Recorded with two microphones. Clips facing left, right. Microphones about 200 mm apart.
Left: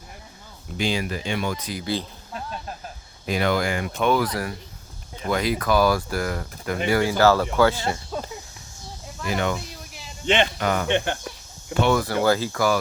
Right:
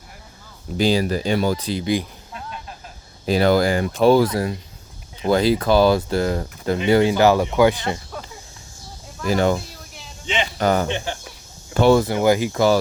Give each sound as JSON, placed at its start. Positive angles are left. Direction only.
{"t": 0.8, "sound": "speech", "side_deg": -35}
{"t": 3.2, "sound": "speech", "side_deg": -35}
{"t": 9.2, "sound": "speech", "side_deg": -35}
{"t": 10.6, "sound": "speech", "side_deg": -35}
{"t": 10.8, "sound": "speech", "side_deg": 60}
{"t": 11.7, "sound": "speech", "side_deg": -35}
{"t": 12.0, "sound": "speech", "side_deg": -15}